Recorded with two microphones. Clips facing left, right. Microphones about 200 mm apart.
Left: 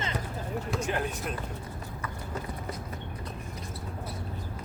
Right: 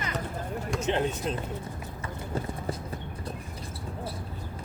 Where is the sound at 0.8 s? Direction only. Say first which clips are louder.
Right 4 dB; 25° right (ahead or behind).